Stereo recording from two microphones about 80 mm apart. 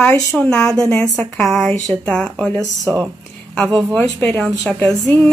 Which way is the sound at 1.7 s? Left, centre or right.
Left.